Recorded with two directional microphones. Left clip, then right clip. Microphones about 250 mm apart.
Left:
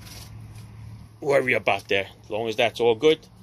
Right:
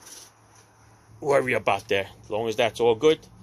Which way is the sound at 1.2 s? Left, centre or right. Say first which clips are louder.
Left 1 dB; centre.